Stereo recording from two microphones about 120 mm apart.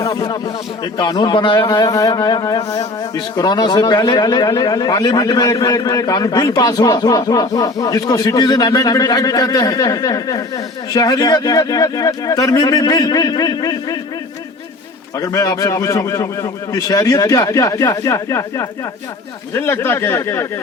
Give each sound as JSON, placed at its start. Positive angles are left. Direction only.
{"t": 0.2, "sound": "a man's voice", "side_deg": 45}
{"t": 15.2, "sound": "a man's voice", "side_deg": 30}